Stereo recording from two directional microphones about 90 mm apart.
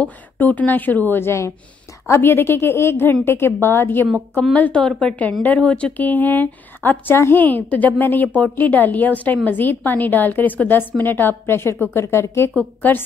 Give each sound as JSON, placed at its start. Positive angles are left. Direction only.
{"t": 0.0, "sound": "a woman's voice", "side_deg": 15}
{"t": 4.6, "sound": "a woman's voice", "side_deg": 15}